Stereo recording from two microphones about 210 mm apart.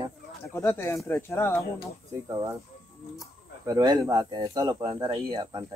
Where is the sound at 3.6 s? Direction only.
15° right (ahead or behind).